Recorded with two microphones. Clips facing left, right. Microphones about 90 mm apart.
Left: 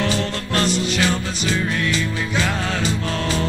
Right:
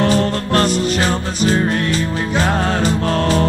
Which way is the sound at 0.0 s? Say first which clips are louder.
Right 7 dB; 45° right (ahead or behind).